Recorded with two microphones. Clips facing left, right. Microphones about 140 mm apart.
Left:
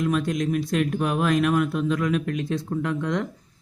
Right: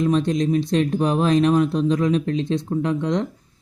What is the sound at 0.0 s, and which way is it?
Speech, 30° right (ahead or behind).